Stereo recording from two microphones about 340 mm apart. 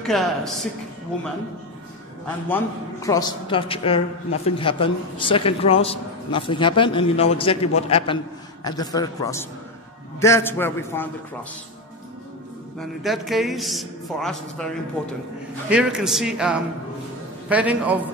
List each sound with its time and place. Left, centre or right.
0.0 s a man's voice: centre
2.4 s a woman's voice: centre
12.7 s a man's voice: centre
15.7 s a man's voice: centre